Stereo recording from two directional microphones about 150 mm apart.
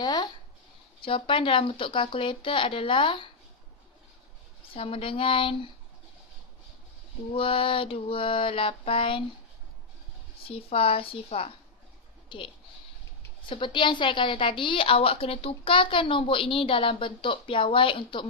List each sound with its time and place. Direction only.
0.0 s a woman's voice: 30° left (ahead or behind)
4.7 s a woman's voice: 40° left (ahead or behind)
7.3 s a woman's voice: 35° left (ahead or behind)
10.5 s a woman's voice: 40° left (ahead or behind)
13.5 s a woman's voice: 30° left (ahead or behind)